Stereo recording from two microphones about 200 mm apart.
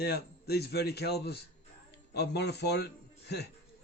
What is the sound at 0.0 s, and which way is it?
A man's voice, 55° left (ahead or behind).